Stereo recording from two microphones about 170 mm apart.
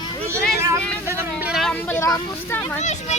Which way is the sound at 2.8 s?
40° left (ahead or behind).